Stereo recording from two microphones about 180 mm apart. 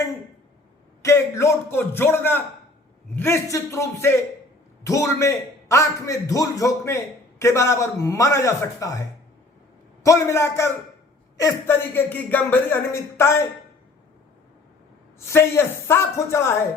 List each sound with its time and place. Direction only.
1.0 s a man's voice: 15° left (ahead or behind)
15.3 s a man's voice: 15° left (ahead or behind)